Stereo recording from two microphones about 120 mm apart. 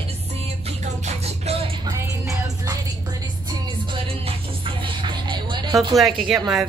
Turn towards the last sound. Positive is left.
turn(degrees=-5)  # may be behind; listen again after turning